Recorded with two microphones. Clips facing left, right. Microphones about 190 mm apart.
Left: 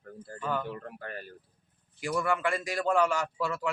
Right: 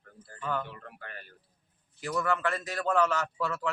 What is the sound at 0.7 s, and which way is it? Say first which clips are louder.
Speech: left 6 dB; 40° left (ahead or behind).